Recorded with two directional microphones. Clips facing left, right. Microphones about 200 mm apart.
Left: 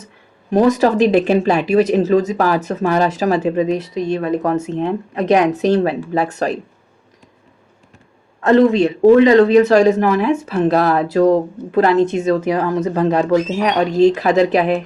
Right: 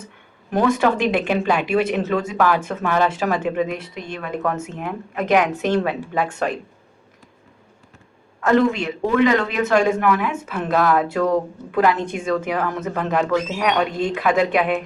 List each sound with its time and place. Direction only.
0.5 s speech: 35° left (ahead or behind)
8.4 s speech: 35° left (ahead or behind)
12.0 s a woman's voice: 25° left (ahead or behind)